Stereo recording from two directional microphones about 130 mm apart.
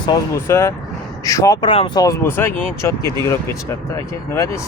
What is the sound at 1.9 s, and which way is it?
Speech, 25° left (ahead or behind).